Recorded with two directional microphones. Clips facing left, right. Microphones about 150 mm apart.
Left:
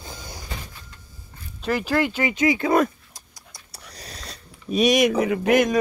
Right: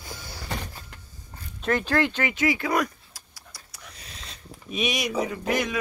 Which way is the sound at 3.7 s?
35° left (ahead or behind).